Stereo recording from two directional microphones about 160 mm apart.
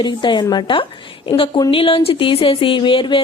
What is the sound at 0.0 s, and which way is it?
Speech, 30° left (ahead or behind).